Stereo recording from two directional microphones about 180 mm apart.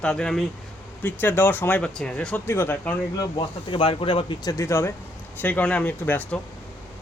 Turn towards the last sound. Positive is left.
turn(degrees=10)  # may be behind; listen again after turning